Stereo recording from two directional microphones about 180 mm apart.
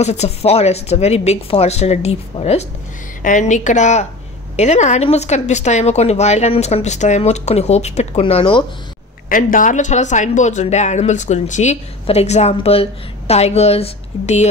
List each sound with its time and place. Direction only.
0.0 s a woman's voice: 35° left (ahead or behind)
9.3 s speech: 50° left (ahead or behind)